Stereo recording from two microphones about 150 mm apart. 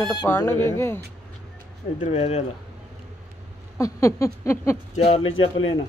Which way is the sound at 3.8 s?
20° left (ahead or behind).